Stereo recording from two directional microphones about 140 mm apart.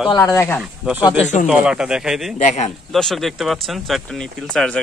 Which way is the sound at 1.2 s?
60° left (ahead or behind).